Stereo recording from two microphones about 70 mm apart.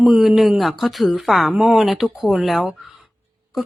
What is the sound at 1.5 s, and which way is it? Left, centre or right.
A woman's voice, centre.